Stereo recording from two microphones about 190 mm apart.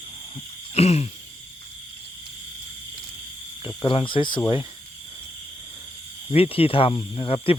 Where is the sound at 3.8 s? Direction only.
25° left (ahead or behind).